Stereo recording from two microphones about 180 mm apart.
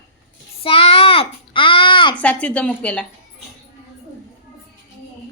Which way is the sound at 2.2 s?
5° left (ahead or behind).